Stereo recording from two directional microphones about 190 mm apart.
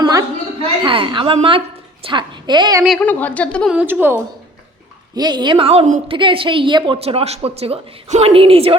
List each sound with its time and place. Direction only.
0.0 s a sound: 20° right (ahead or behind)
0.9 s a woman's voice: 25° right (ahead or behind)
2.8 s a woman's voice: 5° left (ahead or behind)
3.8 s a woman's voice: 10° right (ahead or behind)
5.1 s a woman's voice: 20° right (ahead or behind)